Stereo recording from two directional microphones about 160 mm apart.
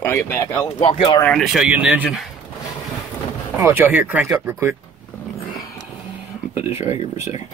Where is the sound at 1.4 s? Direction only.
Centre (ahead or behind).